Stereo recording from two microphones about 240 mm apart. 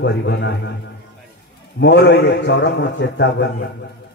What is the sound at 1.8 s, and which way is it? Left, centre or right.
A man's voice, left.